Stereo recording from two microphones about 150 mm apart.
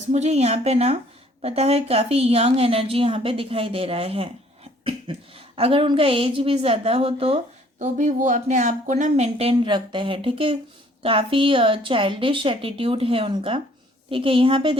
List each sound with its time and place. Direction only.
0.1 s a woman's voice: 45° right (ahead or behind)
4.8 s cough: 35° right (ahead or behind)
5.5 s a woman's voice: 40° right (ahead or behind)
7.8 s a woman's voice: 55° right (ahead or behind); by 14.8 s 35° right (ahead or behind)